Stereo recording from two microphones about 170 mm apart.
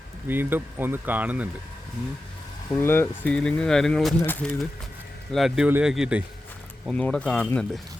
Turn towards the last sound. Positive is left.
turn(degrees=5)  # may be behind; listen again after turning